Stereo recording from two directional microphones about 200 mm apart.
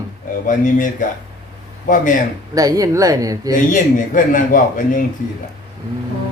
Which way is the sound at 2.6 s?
15° right (ahead or behind).